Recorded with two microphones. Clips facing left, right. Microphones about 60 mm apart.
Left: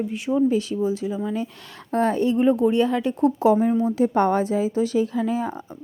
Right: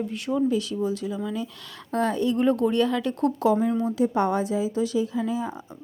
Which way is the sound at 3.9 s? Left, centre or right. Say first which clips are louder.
Left 3 dB; left.